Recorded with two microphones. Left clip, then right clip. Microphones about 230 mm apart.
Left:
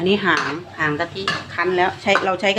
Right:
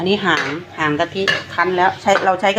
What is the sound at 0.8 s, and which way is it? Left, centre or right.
Dishes, centre.